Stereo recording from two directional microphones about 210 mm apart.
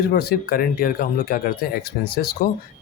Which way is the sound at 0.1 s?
45° left (ahead or behind).